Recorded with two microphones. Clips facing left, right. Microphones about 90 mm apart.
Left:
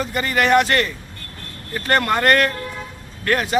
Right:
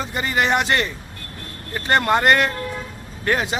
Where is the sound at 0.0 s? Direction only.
20° right (ahead or behind).